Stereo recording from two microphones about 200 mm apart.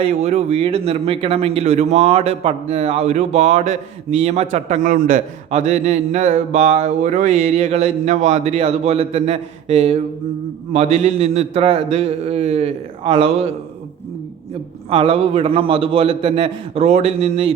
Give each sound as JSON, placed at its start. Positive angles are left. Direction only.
{"t": 0.0, "sound": "speech", "side_deg": -35}
{"t": 14.8, "sound": "a man's voice", "side_deg": -25}